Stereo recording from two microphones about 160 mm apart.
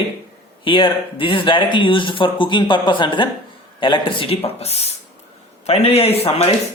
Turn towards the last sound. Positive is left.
turn(degrees=40)  # may be behind; listen again after turning